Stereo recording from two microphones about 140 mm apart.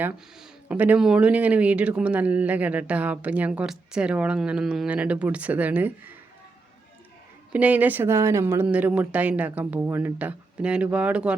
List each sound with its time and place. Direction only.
0.3 s speech: 10° right (ahead or behind)
7.5 s speech: 10° right (ahead or behind)